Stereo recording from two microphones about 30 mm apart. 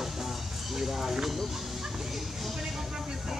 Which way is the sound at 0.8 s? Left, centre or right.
Centre.